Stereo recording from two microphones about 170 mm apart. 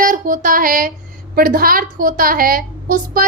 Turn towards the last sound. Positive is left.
turn(degrees=-55)  # may be behind; listen again after turning